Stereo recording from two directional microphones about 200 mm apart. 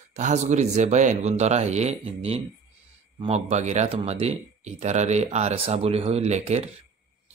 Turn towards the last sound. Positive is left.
turn(degrees=-30)  # may be behind; listen again after turning